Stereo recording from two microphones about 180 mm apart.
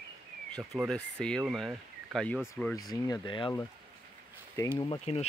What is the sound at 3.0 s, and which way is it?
Speech, 25° left (ahead or behind).